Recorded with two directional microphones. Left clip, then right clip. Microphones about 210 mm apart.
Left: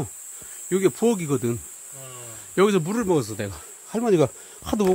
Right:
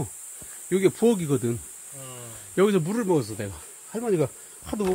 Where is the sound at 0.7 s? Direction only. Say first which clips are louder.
Even; 10° left (ahead or behind).